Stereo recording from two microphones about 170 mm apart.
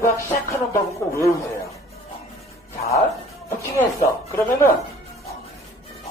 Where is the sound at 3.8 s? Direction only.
15° left (ahead or behind).